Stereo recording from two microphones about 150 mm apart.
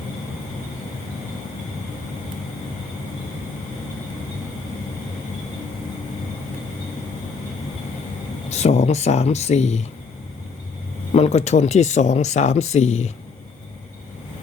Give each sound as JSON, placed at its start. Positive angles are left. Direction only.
{"t": 8.4, "sound": "speech", "side_deg": 45}
{"t": 11.1, "sound": "speech", "side_deg": 45}